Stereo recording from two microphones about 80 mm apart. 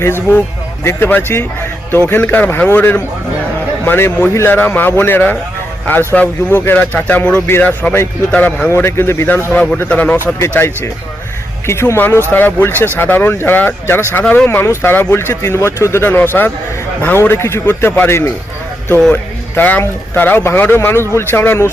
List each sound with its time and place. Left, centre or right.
0.9 s speech: left
8.7 s speech: left
10.4 s speech: left
14.6 s speech: left